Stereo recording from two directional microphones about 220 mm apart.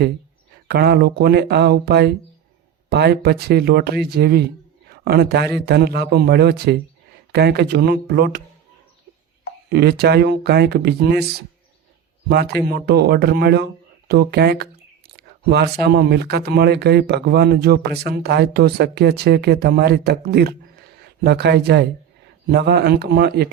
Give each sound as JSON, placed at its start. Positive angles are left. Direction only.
{"t": 0.7, "sound": "speech", "side_deg": -45}
{"t": 9.6, "sound": "speech", "side_deg": -45}
{"t": 12.3, "sound": "speech", "side_deg": -45}
{"t": 15.1, "sound": "a sound", "side_deg": -50}
{"t": 15.8, "sound": "speech", "side_deg": -45}